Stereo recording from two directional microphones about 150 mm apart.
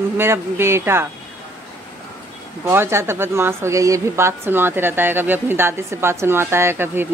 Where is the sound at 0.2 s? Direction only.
15° right (ahead or behind).